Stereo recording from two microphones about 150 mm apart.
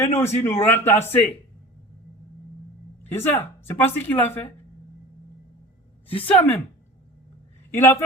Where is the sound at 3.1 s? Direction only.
15° left (ahead or behind).